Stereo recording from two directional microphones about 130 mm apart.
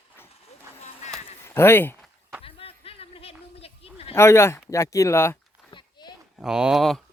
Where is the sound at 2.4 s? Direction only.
45° left (ahead or behind).